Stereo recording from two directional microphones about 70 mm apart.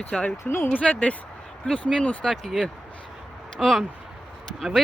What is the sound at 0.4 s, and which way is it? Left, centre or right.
Speech, left.